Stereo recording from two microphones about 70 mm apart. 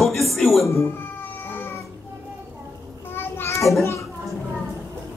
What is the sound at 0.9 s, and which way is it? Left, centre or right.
Cat, left.